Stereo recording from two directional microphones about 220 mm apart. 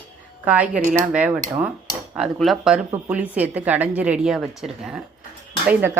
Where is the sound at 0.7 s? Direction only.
35° right (ahead or behind).